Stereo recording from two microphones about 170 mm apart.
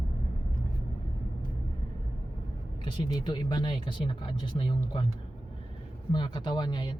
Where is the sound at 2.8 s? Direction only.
25° left (ahead or behind).